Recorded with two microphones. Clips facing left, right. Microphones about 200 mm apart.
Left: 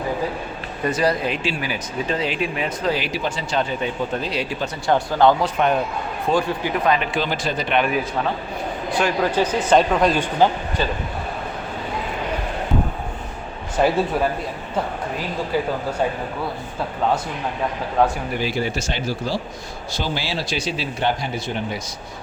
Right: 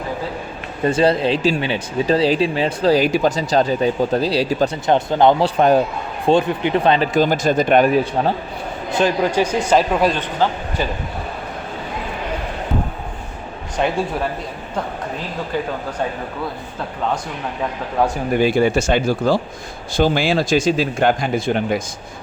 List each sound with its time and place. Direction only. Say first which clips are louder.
0.9 s speech: right 5 dB; 30° right (ahead or behind)
4.9 s speech: right 1 dB; 20° right (ahead or behind)
5.5 s speech: right 6 dB; 35° right (ahead or behind)
6.2 s speech: right 5 dB; 25° right (ahead or behind)
7.1 s speech: right 7 dB; 45° right (ahead or behind)
8.9 s a man's voice: right 3 dB; 20° right (ahead or behind)
10.4 s speech: left 2 dB; 15° left (ahead or behind)
15.5 s speech: left 1 dB; 5° left (ahead or behind)
18.3 s speech: right 11 dB; 55° right (ahead or behind)